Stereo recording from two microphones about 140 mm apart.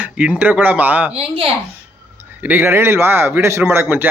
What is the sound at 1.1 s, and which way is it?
Speech, 40° right (ahead or behind).